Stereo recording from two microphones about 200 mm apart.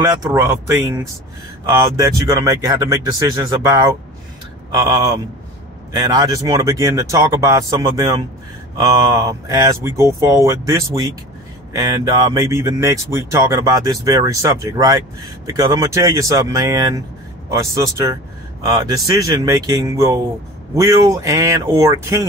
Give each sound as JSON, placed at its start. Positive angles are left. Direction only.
{"t": 0.0, "sound": "a man's voice", "side_deg": -15}